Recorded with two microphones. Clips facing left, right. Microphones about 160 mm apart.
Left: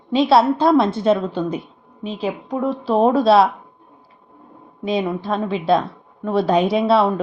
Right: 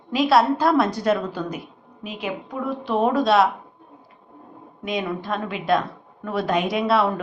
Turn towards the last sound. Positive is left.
turn(degrees=30)  # may be behind; listen again after turning